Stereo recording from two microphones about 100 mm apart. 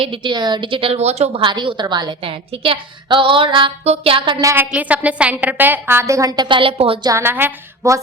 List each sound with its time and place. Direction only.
0.0 s a woman's voice: 60° right (ahead or behind); by 1.5 s 80° right
1.5 s a woman's voice: 50° right (ahead or behind)
2.3 s a woman's voice: 65° right (ahead or behind)
3.8 s music: 70° right (ahead or behind)
4.7 s a woman's voice: 15° right (ahead or behind); by 6.6 s 45° right (ahead or behind)
6.6 s a woman's voice: 65° right (ahead or behind)
7.2 s a woman's voice: 20° right (ahead or behind)